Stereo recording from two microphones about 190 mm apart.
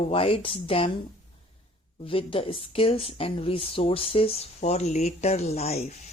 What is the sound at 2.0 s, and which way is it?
Speech, 30° left (ahead or behind).